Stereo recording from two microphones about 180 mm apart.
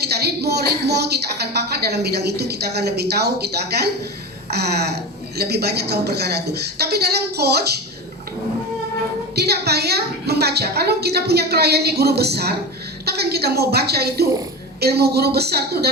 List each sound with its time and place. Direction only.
0.0 s a woman's voice: 65° right (ahead or behind)
9.3 s a woman's voice: 65° right (ahead or behind)